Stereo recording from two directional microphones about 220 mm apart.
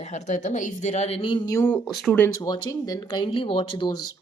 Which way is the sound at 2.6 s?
15° left (ahead or behind).